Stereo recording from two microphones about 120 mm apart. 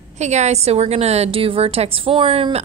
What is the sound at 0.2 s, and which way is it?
A woman's voice, 75° right (ahead or behind).